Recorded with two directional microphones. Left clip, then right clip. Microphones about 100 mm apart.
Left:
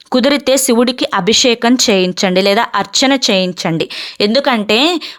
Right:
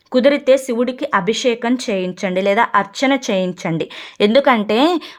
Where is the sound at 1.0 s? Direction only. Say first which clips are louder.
Left 5 dB; 40° left (ahead or behind).